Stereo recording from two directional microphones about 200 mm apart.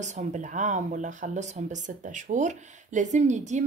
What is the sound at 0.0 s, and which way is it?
Speech, 35° right (ahead or behind).